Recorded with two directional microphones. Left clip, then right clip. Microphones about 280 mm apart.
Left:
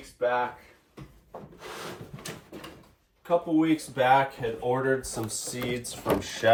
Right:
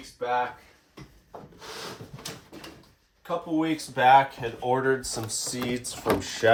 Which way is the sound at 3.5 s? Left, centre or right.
Centre.